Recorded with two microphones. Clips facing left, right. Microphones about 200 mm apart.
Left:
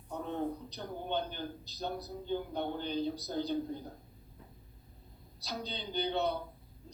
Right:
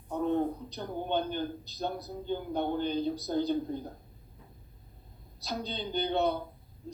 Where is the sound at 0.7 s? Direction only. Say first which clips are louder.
Right 4 dB; 50° right (ahead or behind).